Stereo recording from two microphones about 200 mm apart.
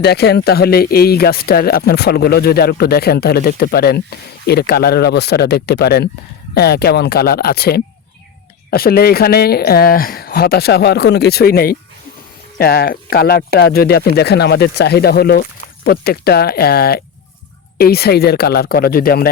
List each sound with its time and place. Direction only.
0.0 s speech: 55° left (ahead or behind)